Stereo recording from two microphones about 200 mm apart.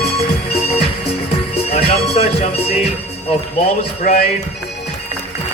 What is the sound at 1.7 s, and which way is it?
Music, 30° left (ahead or behind).